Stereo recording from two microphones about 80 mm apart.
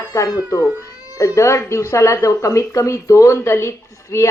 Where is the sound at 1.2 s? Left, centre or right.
Left.